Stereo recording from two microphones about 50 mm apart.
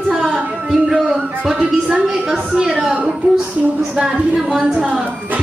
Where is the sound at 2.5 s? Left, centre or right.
Centre.